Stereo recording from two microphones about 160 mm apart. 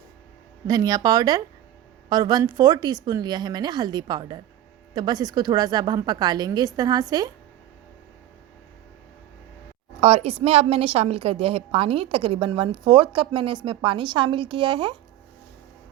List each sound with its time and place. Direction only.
0.7 s a woman's voice: 25° right (ahead or behind)
10.0 s a woman's voice: 40° right (ahead or behind)